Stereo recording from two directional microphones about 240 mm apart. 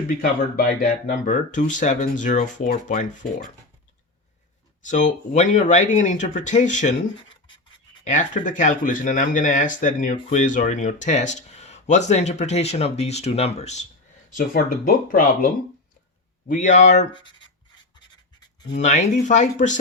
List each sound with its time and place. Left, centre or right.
0.2 s speech: left
4.9 s speech: left
7.3 s scratch: centre
8.0 s speech: left
16.5 s speech: left
18.8 s speech: left